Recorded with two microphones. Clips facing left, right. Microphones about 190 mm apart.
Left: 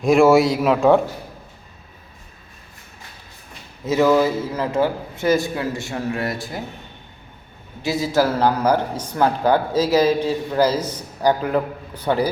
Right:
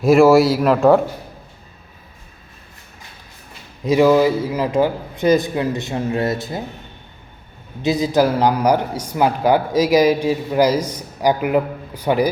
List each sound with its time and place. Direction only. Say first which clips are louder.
0.0 s a man's voice: right 2 dB; centre (ahead or behind)
3.8 s a man's voice: right 3 dB; 15° right (ahead or behind)
7.8 s a man's voice: right 3 dB; 20° right (ahead or behind)